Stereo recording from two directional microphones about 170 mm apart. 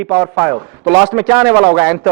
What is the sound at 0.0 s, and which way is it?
A man's voice, 10° right (ahead or behind).